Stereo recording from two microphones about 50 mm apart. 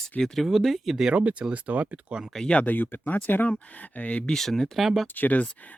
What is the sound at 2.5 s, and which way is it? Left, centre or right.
Speech, left.